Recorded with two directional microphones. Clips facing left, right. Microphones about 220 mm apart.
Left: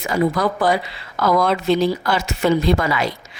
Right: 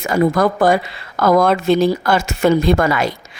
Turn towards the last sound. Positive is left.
turn(degrees=-50)  # may be behind; listen again after turning